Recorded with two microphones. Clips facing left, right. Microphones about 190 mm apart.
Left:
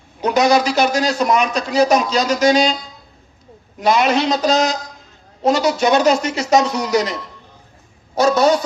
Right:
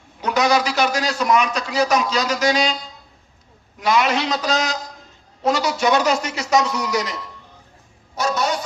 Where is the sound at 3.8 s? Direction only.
25° left (ahead or behind).